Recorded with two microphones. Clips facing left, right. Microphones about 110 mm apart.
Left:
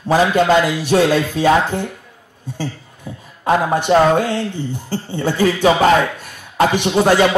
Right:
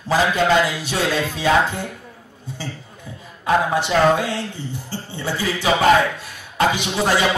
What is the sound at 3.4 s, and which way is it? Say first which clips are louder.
Speech: left 2 dB; 50° left (ahead or behind).